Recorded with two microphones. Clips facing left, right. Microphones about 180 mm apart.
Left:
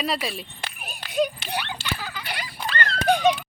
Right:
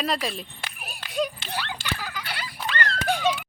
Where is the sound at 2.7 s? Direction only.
35° left (ahead or behind).